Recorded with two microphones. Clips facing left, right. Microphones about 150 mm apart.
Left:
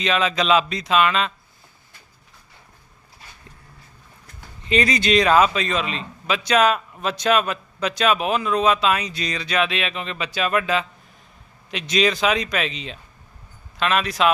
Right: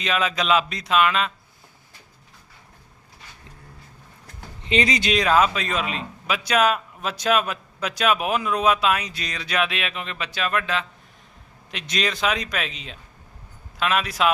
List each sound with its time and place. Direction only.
0.0 s a man's voice: 5° right (ahead or behind)
4.6 s a man's voice: 20° right (ahead or behind); by 14.3 s 5° right (ahead or behind)